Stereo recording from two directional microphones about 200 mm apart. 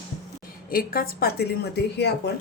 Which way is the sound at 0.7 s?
45° left (ahead or behind).